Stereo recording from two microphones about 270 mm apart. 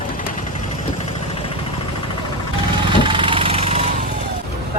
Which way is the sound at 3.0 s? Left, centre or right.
Centre.